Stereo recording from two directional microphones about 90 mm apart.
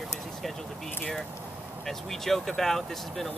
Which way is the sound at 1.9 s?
5° left (ahead or behind).